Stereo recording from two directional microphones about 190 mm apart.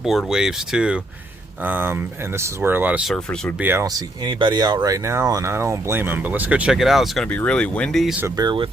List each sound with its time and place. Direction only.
0.0 s speech: centre (ahead or behind)
3.7 s speech: 15° right (ahead or behind); by 8.1 s 5° left (ahead or behind)
8.2 s speech: 20° right (ahead or behind)